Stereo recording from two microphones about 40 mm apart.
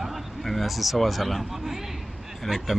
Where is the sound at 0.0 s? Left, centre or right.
Centre.